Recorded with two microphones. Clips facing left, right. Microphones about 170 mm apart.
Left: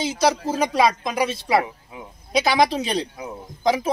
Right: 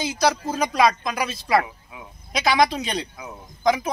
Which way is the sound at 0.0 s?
25° left (ahead or behind).